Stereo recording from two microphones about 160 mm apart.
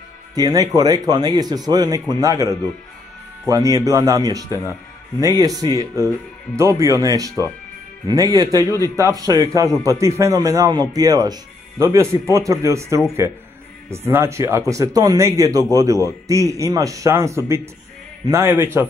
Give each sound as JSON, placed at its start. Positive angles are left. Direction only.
{"t": 0.4, "sound": "a man's voice", "side_deg": -25}